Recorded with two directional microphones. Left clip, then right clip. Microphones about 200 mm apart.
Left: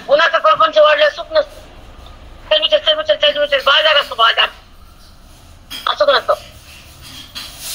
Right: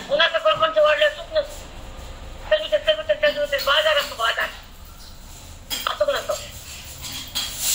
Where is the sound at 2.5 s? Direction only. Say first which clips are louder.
Left 7 dB; 60° left (ahead or behind).